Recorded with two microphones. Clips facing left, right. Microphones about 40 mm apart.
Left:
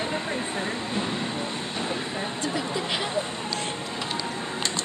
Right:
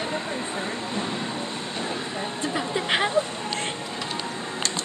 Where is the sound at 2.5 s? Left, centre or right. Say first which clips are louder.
Right 6 dB; right.